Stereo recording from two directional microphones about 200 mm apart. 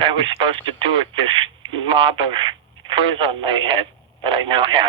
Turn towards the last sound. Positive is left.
turn(degrees=-25)  # may be behind; listen again after turning